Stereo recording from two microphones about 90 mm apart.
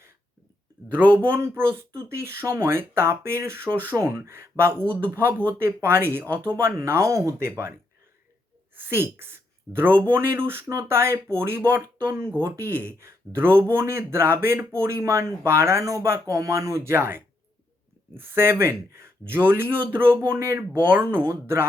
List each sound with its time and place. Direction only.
1.1 s speech: 25° right (ahead or behind)
8.7 s speech: 25° right (ahead or behind)